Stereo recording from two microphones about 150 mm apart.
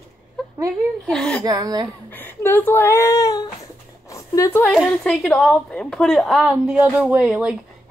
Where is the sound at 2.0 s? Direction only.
15° left (ahead or behind).